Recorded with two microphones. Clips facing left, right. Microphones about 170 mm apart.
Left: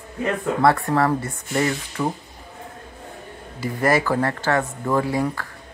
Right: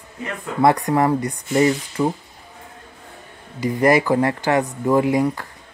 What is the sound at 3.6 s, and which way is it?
Speech, 15° right (ahead or behind).